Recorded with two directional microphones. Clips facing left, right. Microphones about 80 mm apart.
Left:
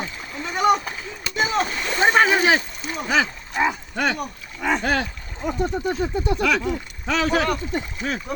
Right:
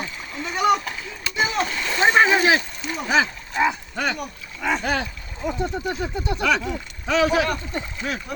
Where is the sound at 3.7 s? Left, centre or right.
Left.